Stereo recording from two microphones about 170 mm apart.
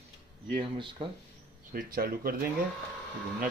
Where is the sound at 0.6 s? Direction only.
30° right (ahead or behind).